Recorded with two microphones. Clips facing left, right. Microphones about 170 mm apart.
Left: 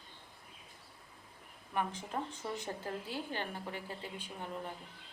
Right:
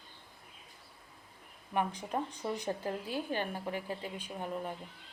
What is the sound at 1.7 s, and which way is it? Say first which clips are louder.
A woman's voice: right 3 dB; 15° right (ahead or behind).